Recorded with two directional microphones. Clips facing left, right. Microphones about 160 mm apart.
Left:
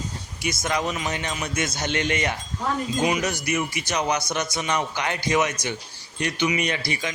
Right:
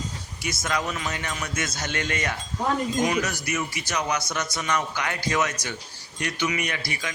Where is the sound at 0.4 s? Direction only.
20° left (ahead or behind).